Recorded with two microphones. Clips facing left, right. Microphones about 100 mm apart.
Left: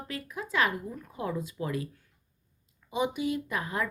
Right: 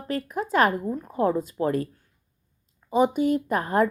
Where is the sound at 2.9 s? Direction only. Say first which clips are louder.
Right 8 dB; 40° right (ahead or behind).